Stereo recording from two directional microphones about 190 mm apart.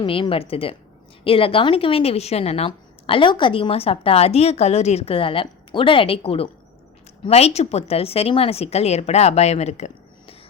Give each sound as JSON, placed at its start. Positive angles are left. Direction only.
{"t": 0.0, "sound": "a woman's voice", "side_deg": 30}